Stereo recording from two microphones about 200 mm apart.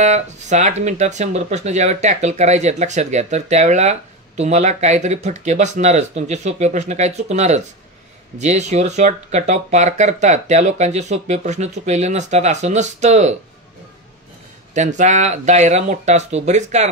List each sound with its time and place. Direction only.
0.0 s speech: 35° right (ahead or behind)
14.7 s speech: 35° right (ahead or behind)